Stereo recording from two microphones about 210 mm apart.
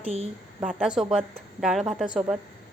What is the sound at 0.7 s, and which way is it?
A woman's voice, centre (ahead or behind).